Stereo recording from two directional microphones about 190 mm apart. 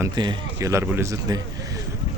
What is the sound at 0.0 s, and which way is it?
Speech, 20° right (ahead or behind).